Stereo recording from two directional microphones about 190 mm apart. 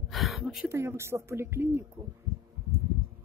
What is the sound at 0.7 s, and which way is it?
Speech, 15° right (ahead or behind).